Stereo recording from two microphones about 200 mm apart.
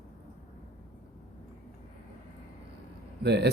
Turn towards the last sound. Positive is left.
turn(degrees=-55)  # may be behind; listen again after turning